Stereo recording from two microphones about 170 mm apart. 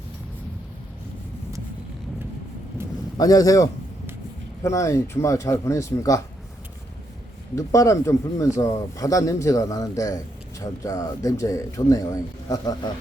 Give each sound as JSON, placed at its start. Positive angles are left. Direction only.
{"t": 3.2, "sound": "speech", "side_deg": 20}
{"t": 7.5, "sound": "speech", "side_deg": 20}